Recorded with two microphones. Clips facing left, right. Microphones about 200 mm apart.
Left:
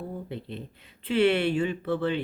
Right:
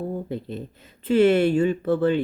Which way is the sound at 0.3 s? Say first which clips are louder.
Right 6 dB; 40° right (ahead or behind).